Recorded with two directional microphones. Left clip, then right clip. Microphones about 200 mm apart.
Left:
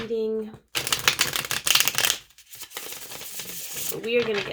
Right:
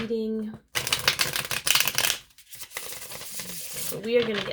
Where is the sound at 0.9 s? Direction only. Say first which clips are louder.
Left 2 dB; 20° left (ahead or behind).